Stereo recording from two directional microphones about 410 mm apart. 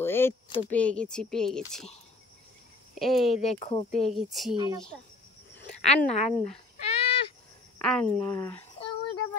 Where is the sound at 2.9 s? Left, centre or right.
Centre.